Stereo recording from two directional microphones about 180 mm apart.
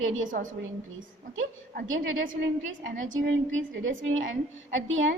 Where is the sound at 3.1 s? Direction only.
90° right.